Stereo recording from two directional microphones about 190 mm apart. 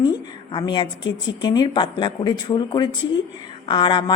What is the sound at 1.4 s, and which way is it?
A woman's voice, 25° left (ahead or behind).